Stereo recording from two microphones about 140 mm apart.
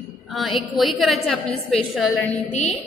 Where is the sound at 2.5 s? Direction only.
55° left (ahead or behind).